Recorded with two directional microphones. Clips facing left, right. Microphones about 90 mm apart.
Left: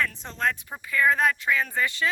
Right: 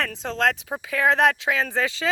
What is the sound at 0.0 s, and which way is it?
Speech, 90° right.